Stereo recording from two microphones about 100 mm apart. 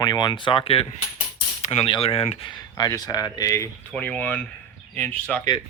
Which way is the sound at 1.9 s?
75° left (ahead or behind).